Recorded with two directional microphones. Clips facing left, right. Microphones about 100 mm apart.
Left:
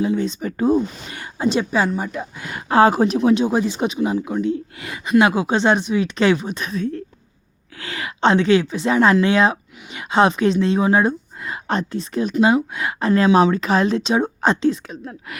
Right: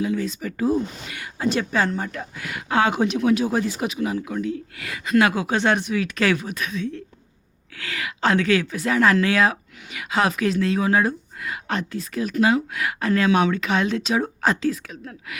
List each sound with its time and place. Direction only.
0.0 s speech: 30° left (ahead or behind)
1.5 s a woman's voice: 20° left (ahead or behind)
2.4 s speech: 35° left (ahead or behind)
3.2 s speech: 25° left (ahead or behind)
6.7 s a woman's voice: 45° left (ahead or behind)
7.8 s speech: 30° left (ahead or behind)